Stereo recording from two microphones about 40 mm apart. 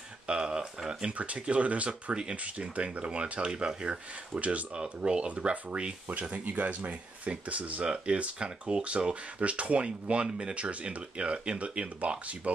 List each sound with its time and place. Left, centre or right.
0.3 s speech: right
1.1 s speech: right
7.9 s speech: right